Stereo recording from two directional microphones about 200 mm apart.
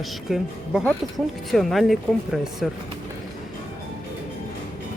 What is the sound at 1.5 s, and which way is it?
Speech, centre (ahead or behind).